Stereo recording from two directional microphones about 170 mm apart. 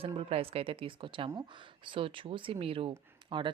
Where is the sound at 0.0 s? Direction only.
35° right (ahead or behind).